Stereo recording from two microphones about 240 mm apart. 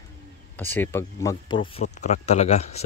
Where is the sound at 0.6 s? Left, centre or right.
Centre.